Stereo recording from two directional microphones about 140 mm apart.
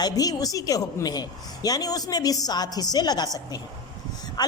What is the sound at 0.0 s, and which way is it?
A woman's voice, 25° left (ahead or behind).